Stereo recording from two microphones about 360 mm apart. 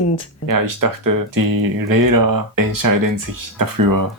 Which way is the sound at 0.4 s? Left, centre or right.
Right.